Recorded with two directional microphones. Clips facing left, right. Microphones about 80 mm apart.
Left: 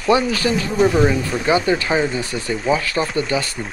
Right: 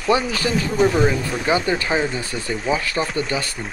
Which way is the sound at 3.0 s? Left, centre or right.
Centre.